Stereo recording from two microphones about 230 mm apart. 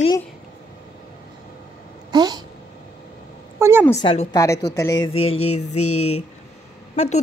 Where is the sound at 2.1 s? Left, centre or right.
Centre.